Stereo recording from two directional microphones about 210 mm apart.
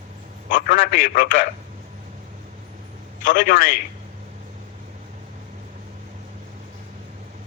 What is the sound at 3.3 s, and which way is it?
Speech, 40° left (ahead or behind).